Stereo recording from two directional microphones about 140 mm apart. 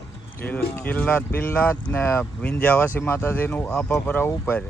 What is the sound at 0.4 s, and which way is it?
Speech, 10° left (ahead or behind).